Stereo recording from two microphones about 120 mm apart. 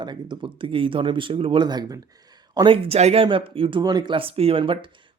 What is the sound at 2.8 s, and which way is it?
Speech, 60° right (ahead or behind).